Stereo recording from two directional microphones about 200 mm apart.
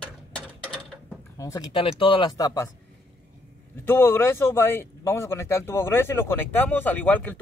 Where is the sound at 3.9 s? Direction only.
10° left (ahead or behind).